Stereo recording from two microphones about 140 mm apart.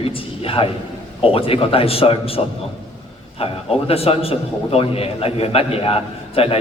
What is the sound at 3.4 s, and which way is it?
A man's voice, 45° left (ahead or behind).